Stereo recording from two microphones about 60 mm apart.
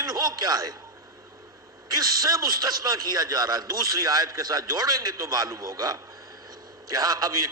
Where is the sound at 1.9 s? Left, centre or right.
Right.